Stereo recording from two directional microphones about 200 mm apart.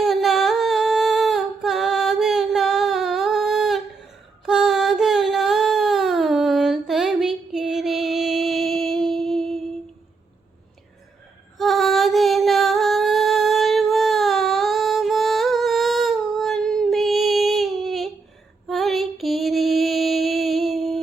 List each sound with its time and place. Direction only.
0.0 s humming: centre (ahead or behind)
4.4 s music: 5° right (ahead or behind)
11.5 s singing: centre (ahead or behind)
18.7 s female singing: centre (ahead or behind)